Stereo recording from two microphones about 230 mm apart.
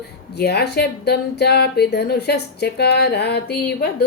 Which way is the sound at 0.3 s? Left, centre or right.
Left.